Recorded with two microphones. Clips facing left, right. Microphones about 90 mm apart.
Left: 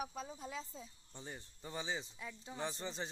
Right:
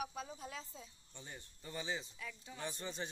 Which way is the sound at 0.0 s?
25° left (ahead or behind).